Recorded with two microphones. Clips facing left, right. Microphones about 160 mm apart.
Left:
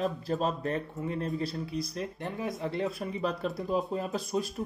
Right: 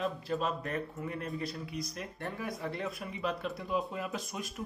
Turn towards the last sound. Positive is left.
turn(degrees=35)  # may be behind; listen again after turning